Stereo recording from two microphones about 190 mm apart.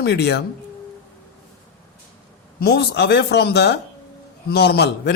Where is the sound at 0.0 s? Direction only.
60° left (ahead or behind).